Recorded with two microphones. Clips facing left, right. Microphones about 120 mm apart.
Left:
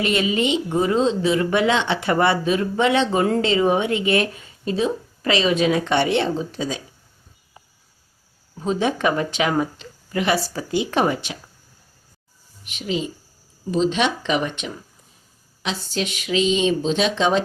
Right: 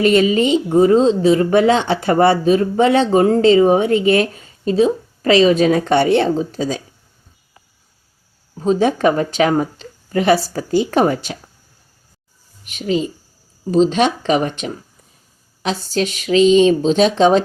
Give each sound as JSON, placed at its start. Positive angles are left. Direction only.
{"t": 0.0, "sound": "speech", "side_deg": -40}
{"t": 8.5, "sound": "speech", "side_deg": -35}
{"t": 12.6, "sound": "speech", "side_deg": -45}